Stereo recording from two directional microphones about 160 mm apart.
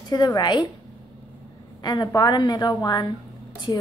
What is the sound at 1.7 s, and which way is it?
A woman's voice, 25° left (ahead or behind).